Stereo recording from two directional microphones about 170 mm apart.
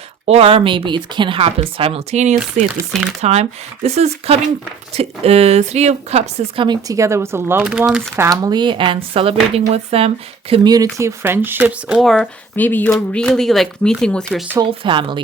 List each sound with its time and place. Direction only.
0.3 s speech: 35° right (ahead or behind)
6.7 s speech: 20° right (ahead or behind)
8.1 s speech: 20° right (ahead or behind); by 10.1 s 35° right (ahead or behind)
10.5 s speech: 25° right (ahead or behind)
11.9 s speech: centre (ahead or behind)
14.6 s speech: 30° right (ahead or behind)